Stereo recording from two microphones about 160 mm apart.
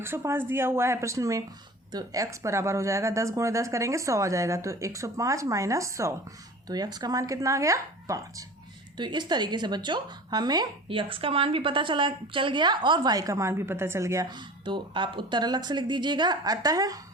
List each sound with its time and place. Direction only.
0.0 s a woman's voice: 15° right (ahead or behind)